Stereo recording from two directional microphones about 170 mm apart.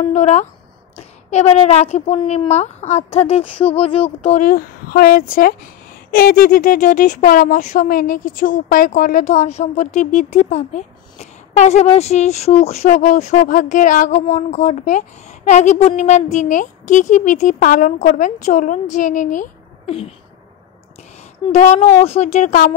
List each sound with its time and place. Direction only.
0.0 s a woman's voice: 40° left (ahead or behind)
4.4 s speech: 55° left (ahead or behind)
19.9 s a woman's voice: 35° left (ahead or behind)
21.5 s a woman's voice: 40° left (ahead or behind)